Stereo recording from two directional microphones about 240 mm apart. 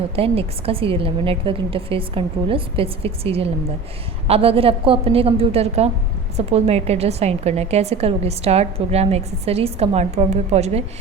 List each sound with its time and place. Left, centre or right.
0.2 s a woman's voice: right